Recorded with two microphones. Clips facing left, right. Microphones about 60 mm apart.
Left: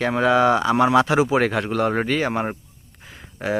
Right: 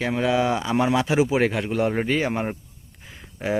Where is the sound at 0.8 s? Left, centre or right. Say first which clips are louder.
Left 2 dB; left.